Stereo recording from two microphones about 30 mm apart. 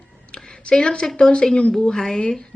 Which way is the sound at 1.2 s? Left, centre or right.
Left.